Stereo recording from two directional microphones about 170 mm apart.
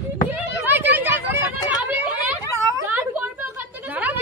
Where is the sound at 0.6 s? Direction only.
10° right (ahead or behind).